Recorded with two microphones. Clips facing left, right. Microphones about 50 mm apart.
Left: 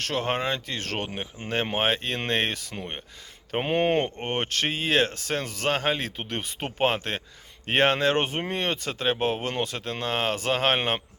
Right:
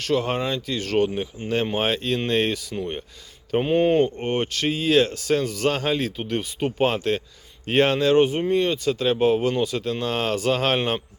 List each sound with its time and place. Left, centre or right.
0.0 s speech: left
3.5 s speech: left